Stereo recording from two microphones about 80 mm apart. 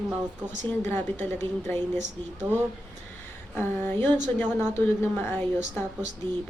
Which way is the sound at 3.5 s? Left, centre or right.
Left.